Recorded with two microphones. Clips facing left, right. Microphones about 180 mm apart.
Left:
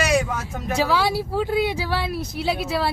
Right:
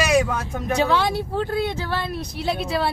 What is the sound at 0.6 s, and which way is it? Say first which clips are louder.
Speech: right 1 dB; centre (ahead or behind).